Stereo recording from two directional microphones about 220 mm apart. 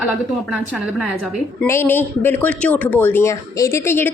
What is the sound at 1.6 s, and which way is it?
Speech, 10° left (ahead or behind).